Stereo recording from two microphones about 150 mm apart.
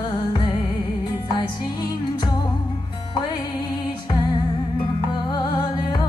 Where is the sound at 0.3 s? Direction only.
30° left (ahead or behind).